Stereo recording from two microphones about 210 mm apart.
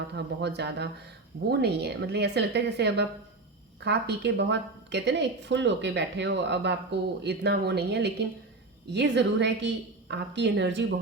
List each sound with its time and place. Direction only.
0.1 s a woman's voice: 55° right (ahead or behind)